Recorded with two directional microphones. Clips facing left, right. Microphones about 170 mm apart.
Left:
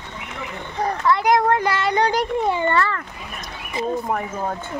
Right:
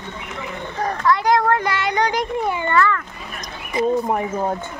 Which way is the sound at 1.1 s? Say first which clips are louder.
Even; 20° left (ahead or behind).